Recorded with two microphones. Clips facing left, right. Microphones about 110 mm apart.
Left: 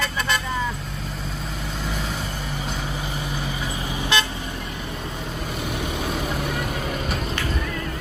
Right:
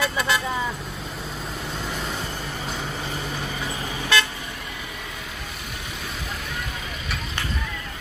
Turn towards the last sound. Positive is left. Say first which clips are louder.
# left 6 dB
turn(degrees=50)  # may be behind; listen again after turning